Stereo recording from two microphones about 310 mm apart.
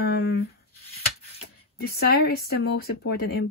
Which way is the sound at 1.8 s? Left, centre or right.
Left.